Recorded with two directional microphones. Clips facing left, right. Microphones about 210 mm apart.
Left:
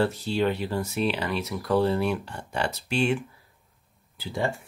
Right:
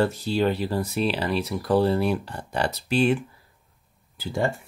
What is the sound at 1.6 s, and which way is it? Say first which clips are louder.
Speech: right 2 dB; 30° right (ahead or behind).